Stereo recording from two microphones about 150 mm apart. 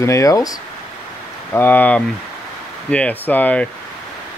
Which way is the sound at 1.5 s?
10° left (ahead or behind).